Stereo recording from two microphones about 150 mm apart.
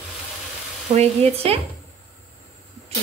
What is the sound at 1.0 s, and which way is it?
Speech, 40° right (ahead or behind).